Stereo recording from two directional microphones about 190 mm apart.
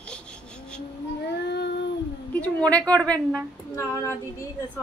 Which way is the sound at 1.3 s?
60° left (ahead or behind).